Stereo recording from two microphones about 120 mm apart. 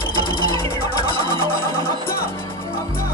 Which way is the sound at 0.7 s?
25° left (ahead or behind).